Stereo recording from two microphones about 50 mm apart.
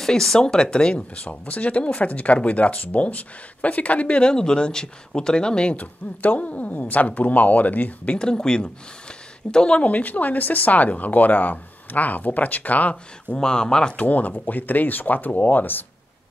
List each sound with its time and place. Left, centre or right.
0.0 s speech: centre
5.8 s speech: left
9.8 s speech: left
13.4 s speech: centre
13.9 s speech: left